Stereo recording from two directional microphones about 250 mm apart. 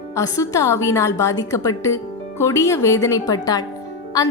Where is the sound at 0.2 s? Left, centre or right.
Centre.